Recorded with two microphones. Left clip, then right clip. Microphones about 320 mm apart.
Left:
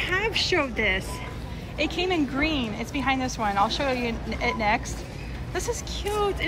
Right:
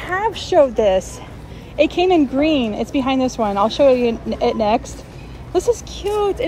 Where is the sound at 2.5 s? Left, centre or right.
Centre.